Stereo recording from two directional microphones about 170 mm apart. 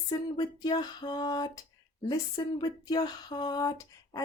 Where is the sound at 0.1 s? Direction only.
25° left (ahead or behind).